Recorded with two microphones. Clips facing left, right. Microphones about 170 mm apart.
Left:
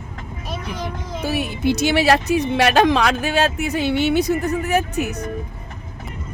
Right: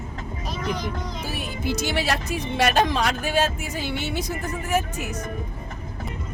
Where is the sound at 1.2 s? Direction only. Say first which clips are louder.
Left 10 dB; 70° left (ahead or behind).